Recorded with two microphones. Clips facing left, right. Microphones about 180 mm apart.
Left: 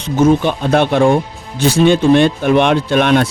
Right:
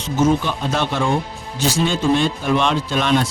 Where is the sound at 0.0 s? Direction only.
60° left (ahead or behind).